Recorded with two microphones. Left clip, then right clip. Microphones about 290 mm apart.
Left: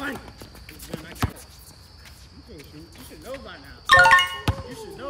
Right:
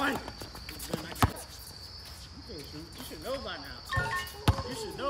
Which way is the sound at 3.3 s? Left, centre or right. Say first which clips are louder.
Even; centre.